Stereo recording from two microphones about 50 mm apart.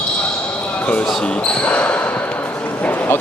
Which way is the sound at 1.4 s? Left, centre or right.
Left.